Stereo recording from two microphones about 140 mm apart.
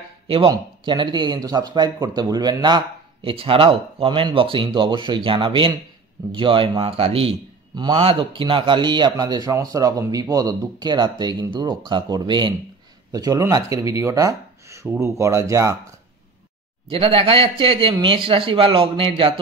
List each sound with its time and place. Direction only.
0.5 s speech: 35° right (ahead or behind)
7.7 s a man's voice: 30° right (ahead or behind)
16.9 s speech: 40° right (ahead or behind)